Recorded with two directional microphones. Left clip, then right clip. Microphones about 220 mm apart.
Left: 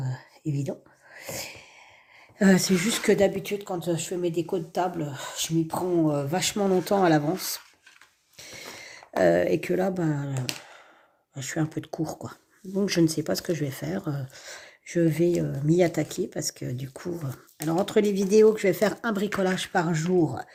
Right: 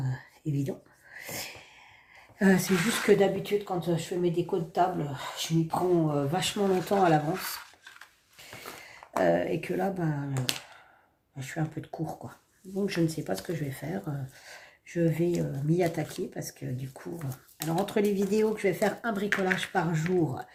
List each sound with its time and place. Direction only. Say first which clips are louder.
0.0 s whispering: left 3 dB; 30° left (ahead or behind)
1.1 s sneeze: left 2 dB; 30° left (ahead or behind)
2.4 s speech: left 3 dB; 40° left (ahead or behind)
8.9 s speech: left 4 dB; 45° left (ahead or behind)
11.3 s speech: left 6 dB; 45° left (ahead or behind)